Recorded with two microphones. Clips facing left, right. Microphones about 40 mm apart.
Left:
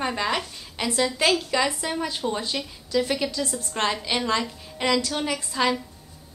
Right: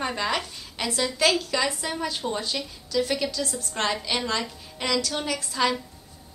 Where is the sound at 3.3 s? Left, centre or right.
Left.